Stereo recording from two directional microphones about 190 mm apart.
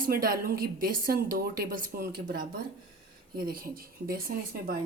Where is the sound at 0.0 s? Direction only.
50° right (ahead or behind).